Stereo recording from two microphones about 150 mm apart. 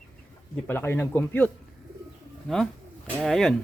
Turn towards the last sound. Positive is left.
turn(degrees=0)  # may be behind; listen again after turning